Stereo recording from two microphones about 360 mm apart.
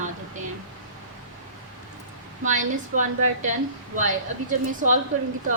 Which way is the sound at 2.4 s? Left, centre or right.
Right.